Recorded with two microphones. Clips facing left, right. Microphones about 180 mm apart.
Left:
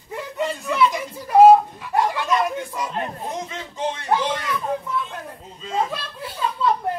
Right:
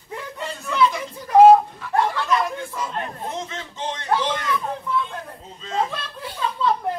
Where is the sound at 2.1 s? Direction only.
15° left (ahead or behind).